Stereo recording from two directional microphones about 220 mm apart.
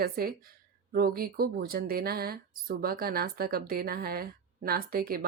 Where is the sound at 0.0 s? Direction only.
45° right (ahead or behind).